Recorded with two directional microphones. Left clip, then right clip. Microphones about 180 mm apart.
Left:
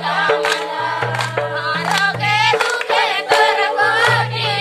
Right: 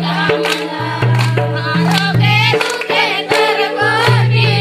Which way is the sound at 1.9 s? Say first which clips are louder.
Even; centre (ahead or behind).